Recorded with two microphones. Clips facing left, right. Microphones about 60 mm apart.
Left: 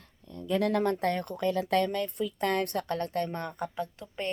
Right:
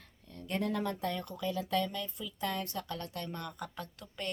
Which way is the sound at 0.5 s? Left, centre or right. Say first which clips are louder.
Left 7 dB; left.